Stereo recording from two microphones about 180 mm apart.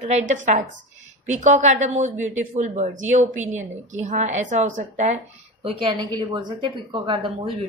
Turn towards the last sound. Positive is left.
turn(degrees=-25)  # may be behind; listen again after turning